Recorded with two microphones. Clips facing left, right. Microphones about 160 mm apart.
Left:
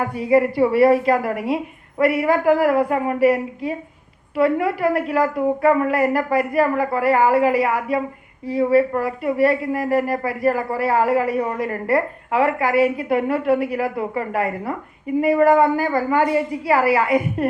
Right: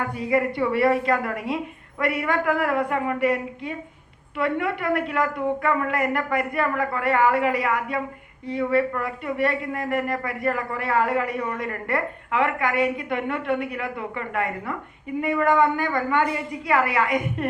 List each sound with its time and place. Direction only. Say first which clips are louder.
0.0 s a woman's voice: left 6 dB; 25° left (ahead or behind)